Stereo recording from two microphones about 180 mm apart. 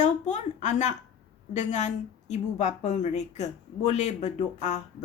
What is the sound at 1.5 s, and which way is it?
A woman's voice, 40° left (ahead or behind).